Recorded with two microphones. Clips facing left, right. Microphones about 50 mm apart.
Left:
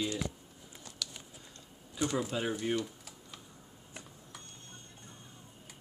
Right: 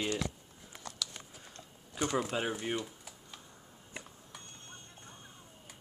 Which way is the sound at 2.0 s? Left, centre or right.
Right.